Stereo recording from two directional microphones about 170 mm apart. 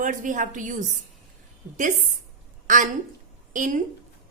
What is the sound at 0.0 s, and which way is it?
A woman's voice, 50° right (ahead or behind).